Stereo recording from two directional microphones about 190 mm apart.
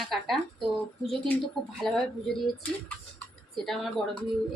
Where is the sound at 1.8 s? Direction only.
Centre (ahead or behind).